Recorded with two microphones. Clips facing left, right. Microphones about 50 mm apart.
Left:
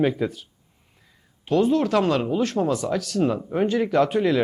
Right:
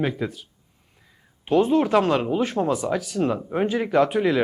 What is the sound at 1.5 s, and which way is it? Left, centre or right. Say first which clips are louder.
Speech: right 1 dB; centre.